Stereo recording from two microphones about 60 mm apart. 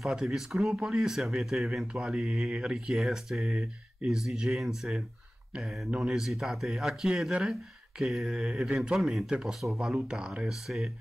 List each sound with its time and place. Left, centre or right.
0.0 s speech: centre
9.6 s speech: centre